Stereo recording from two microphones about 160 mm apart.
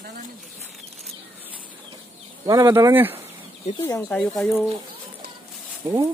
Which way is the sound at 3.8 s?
15° left (ahead or behind).